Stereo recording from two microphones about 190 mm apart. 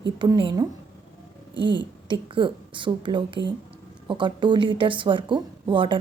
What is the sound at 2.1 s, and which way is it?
A woman's voice, 25° right (ahead or behind).